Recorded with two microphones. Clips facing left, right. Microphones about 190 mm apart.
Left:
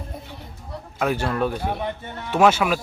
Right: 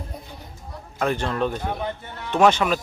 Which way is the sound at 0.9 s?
5° left (ahead or behind).